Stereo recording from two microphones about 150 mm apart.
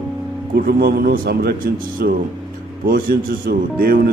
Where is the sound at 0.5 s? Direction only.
90° right.